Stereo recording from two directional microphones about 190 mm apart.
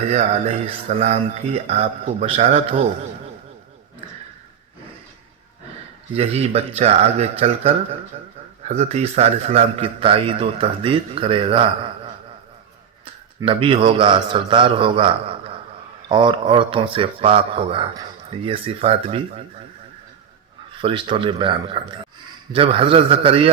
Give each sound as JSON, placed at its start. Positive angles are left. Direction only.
{"t": 0.1, "sound": "speech", "side_deg": -35}
{"t": 6.1, "sound": "a man's voice", "side_deg": -35}
{"t": 13.4, "sound": "a man's voice", "side_deg": -30}
{"t": 20.8, "sound": "a man's voice", "side_deg": -25}